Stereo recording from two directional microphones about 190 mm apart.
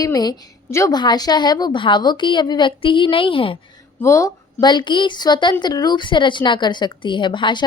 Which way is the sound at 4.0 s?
15° left (ahead or behind).